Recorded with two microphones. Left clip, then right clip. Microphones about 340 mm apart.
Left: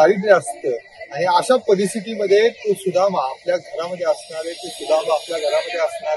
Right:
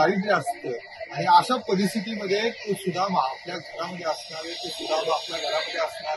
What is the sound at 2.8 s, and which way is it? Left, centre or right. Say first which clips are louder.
Speech: left 6 dB; centre.